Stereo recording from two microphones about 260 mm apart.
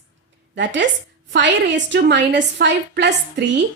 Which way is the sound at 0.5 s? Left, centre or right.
Right.